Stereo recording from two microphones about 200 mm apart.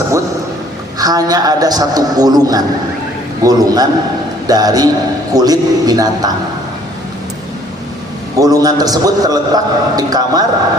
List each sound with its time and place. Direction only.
0.9 s a man's voice: 20° right (ahead or behind)
8.4 s a man's voice: 15° right (ahead or behind)